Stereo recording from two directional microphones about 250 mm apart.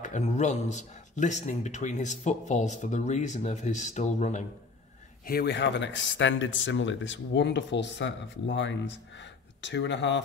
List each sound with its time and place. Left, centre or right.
0.0 s speech: left
5.2 s speech: left